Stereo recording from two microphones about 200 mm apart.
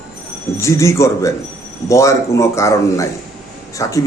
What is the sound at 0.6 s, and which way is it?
A man's voice, 15° left (ahead or behind).